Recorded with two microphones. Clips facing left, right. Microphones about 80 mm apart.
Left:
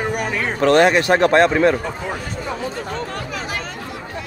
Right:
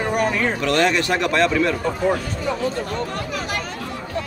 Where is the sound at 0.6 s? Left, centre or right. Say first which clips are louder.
Left 8 dB; left.